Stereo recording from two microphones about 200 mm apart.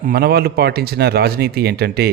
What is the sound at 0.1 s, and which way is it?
A man's voice, 50° right (ahead or behind).